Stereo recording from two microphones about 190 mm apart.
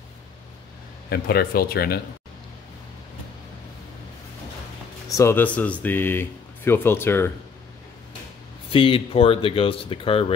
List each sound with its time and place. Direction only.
1.1 s speech: 55° left (ahead or behind)
5.1 s speech: 15° left (ahead or behind)
8.6 s speech: 30° left (ahead or behind)